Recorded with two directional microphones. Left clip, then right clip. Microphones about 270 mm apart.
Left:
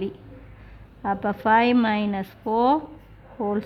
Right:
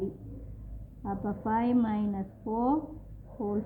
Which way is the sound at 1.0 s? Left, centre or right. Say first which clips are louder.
Left 11 dB; left.